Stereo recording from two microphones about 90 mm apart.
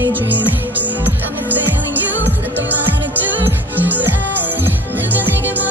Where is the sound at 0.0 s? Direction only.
20° right (ahead or behind).